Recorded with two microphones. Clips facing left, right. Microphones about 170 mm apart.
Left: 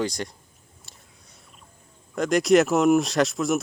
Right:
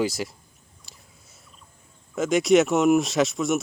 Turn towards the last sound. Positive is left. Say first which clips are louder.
# even
turn(degrees=0)  # may be behind; listen again after turning